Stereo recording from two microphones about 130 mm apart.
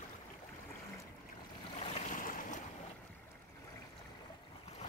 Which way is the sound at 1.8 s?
85° left.